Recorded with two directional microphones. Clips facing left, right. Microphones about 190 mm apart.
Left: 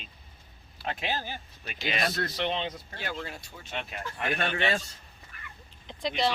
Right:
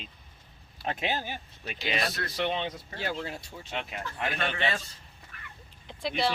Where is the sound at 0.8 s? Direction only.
20° right (ahead or behind).